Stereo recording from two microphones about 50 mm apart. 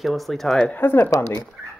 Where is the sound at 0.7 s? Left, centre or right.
Left.